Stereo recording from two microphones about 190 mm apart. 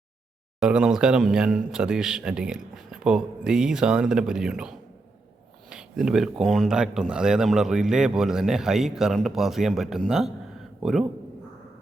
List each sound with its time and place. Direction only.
0.6 s speech: 5° right (ahead or behind)